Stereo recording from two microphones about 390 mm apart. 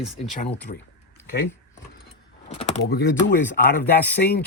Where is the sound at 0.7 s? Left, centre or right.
Centre.